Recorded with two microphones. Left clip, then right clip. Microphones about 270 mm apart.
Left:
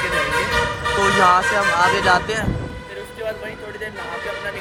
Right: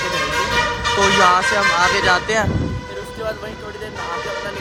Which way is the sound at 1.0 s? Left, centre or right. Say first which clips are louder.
Right 1 dB; centre.